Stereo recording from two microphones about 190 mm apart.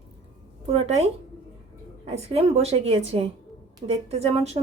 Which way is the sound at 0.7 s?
35° right (ahead or behind).